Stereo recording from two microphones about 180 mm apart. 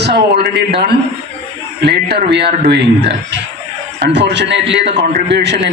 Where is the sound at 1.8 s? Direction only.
65° right (ahead or behind).